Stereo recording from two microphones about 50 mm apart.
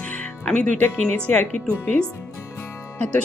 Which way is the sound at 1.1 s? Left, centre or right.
Left.